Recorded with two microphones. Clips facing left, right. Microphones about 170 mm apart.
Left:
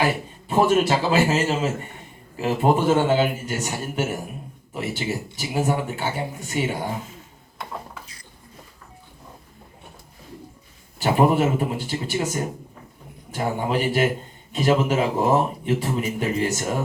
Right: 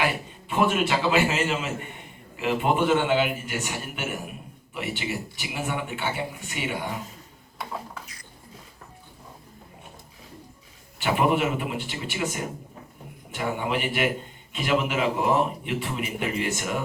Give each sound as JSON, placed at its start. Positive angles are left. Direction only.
{"t": 0.0, "sound": "a man's voice", "side_deg": 35}
{"t": 7.6, "sound": "a sound", "side_deg": 0}
{"t": 11.0, "sound": "a man's voice", "side_deg": 40}